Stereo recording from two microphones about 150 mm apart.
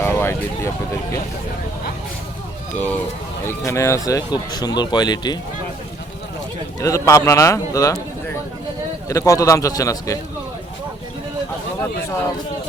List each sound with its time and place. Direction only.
0.0 s vehicle: 15° left (ahead or behind)
2.7 s speech: 10° left (ahead or behind); by 5.4 s 30° left (ahead or behind)
6.7 s speech: 20° left (ahead or behind)
9.0 s speech: 20° left (ahead or behind)